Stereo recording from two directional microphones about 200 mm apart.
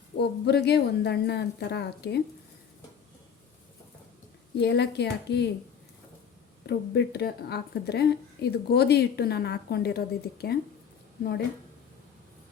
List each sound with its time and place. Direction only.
0.2 s speech: 55° left (ahead or behind)
4.5 s speech: 55° left (ahead or behind)
6.7 s speech: 55° left (ahead or behind)